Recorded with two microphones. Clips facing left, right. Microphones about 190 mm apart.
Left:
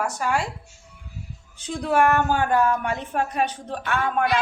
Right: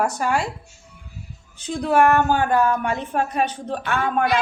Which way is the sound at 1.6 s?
30° right (ahead or behind).